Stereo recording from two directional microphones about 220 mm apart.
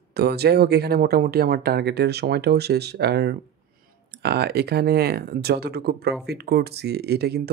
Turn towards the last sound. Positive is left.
turn(degrees=-45)  # may be behind; listen again after turning